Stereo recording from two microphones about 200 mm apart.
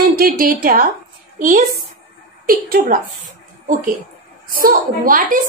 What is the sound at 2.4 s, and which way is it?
A woman's voice, 45° right (ahead or behind).